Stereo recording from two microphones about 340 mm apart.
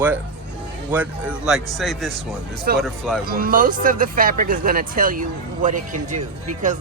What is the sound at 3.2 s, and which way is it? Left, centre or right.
Speech, right.